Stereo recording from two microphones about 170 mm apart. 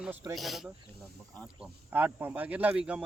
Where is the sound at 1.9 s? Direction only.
10° right (ahead or behind).